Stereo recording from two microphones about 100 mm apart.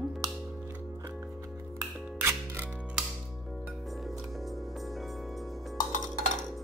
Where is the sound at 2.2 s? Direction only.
20° right (ahead or behind).